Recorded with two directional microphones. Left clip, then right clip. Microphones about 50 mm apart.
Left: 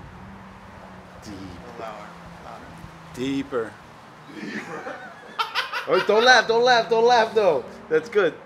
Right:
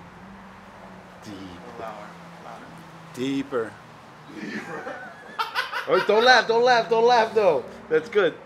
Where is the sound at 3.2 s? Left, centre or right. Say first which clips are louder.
Even; centre.